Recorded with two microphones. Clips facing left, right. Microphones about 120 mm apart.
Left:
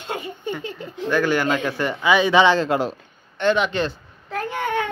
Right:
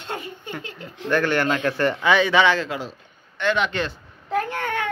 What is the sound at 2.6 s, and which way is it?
Speech, 55° left (ahead or behind).